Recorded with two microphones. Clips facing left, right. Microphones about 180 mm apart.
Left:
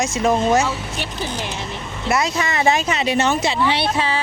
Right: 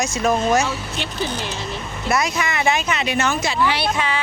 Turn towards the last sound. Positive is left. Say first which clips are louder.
# left 2 dB
turn(degrees=30)  # may be behind; listen again after turning